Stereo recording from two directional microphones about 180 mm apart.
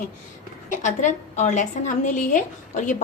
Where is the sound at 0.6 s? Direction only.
45° left (ahead or behind).